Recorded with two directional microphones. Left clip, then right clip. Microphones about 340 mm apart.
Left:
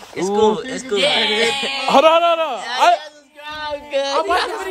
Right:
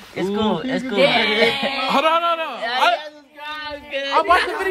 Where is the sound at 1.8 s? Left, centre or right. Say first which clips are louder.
Left 6 dB; left.